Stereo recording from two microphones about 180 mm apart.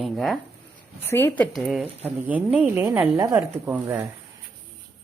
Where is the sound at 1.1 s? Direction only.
10° left (ahead or behind); by 3.4 s 15° right (ahead or behind).